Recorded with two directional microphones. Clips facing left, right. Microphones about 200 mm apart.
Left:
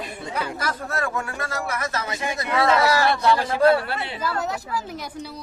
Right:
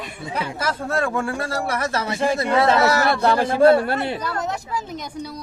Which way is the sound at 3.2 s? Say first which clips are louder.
Right 5 dB; 45° right (ahead or behind).